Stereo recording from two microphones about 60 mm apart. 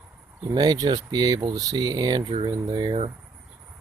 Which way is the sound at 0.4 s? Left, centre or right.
Right.